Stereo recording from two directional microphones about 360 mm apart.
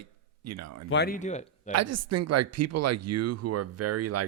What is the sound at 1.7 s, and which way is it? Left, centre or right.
Speech, right.